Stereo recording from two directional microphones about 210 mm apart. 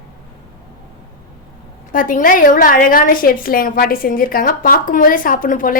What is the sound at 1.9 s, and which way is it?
A woman's voice, 40° left (ahead or behind).